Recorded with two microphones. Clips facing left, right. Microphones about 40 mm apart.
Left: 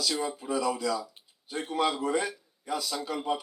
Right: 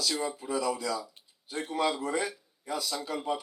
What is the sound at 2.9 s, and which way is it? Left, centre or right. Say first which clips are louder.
Speech: left 1 dB; centre.